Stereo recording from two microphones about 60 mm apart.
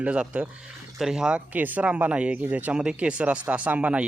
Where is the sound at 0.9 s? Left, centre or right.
Centre.